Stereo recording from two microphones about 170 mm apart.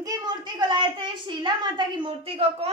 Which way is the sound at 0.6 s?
25° right (ahead or behind).